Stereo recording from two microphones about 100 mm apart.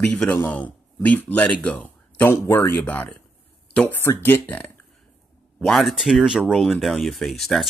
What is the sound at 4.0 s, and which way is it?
Speech, 25° left (ahead or behind).